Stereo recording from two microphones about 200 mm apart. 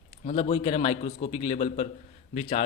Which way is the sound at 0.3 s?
30° left (ahead or behind).